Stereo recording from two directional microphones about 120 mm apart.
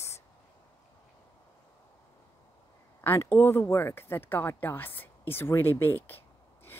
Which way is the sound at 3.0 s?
20° left (ahead or behind).